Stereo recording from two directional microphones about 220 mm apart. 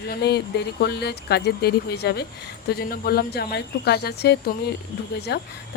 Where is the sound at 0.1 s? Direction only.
45° left (ahead or behind).